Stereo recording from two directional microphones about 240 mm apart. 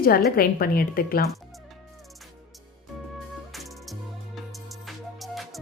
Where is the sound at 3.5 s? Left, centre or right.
Centre.